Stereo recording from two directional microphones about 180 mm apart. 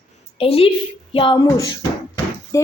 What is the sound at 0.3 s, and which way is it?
Speech, 30° left (ahead or behind).